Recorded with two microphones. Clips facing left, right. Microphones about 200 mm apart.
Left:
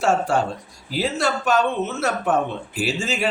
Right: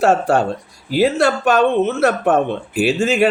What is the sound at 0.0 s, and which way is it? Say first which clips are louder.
Speech: right 5 dB; 65° right (ahead or behind).